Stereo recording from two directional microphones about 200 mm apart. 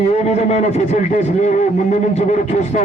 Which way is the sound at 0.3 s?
35° left (ahead or behind).